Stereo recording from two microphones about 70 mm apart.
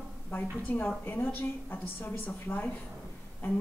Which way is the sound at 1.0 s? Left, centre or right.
Left.